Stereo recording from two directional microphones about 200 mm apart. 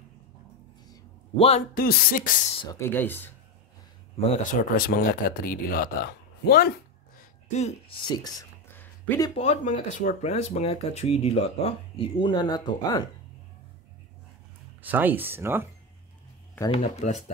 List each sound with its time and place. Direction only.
0.8 s a sound: 30° left (ahead or behind)
1.8 s speech: 50° left (ahead or behind)
2.6 s speech: 15° left (ahead or behind)
4.4 s speech: 45° left (ahead or behind)
7.2 s a sound: 35° left (ahead or behind)
8.1 s a sound: 20° left (ahead or behind)
9.4 s speech: 35° left (ahead or behind); by 13.1 s 20° left (ahead or behind)
14.8 s speech: 10° right (ahead or behind)
16.7 s speech: 35° left (ahead or behind)